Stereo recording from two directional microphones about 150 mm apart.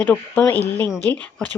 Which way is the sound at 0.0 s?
10° left (ahead or behind).